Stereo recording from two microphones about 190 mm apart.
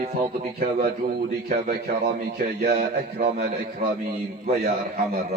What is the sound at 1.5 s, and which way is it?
A man's voice, 55° right (ahead or behind).